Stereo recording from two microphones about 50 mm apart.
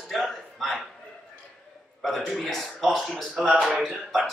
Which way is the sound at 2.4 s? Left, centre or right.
Centre.